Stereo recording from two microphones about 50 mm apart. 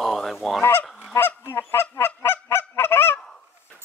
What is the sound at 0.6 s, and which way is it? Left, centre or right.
Goose, left.